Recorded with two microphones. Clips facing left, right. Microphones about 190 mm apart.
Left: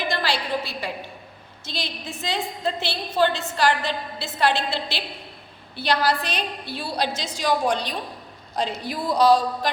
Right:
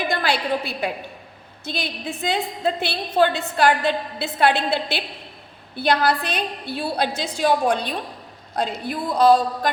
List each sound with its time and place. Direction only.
0.1 s a woman's voice: 55° right (ahead or behind)